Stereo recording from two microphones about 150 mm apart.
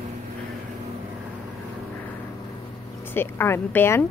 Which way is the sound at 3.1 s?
15° left (ahead or behind).